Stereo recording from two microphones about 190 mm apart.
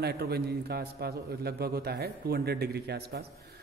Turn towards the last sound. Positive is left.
turn(degrees=-55)  # may be behind; listen again after turning